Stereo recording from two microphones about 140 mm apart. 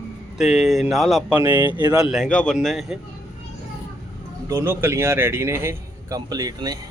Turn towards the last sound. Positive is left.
turn(degrees=-25)  # may be behind; listen again after turning